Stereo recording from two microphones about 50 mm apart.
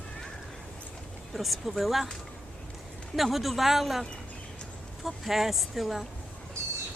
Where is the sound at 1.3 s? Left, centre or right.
Centre.